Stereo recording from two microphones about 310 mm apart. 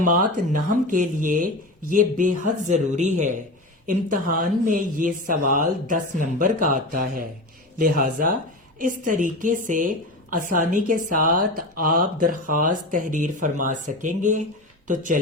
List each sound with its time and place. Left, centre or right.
0.0 s speech: right